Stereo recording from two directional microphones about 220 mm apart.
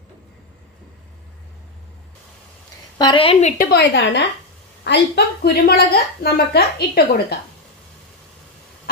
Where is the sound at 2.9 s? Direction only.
20° left (ahead or behind).